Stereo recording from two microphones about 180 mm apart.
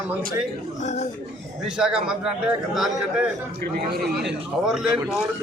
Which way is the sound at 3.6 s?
60° right (ahead or behind).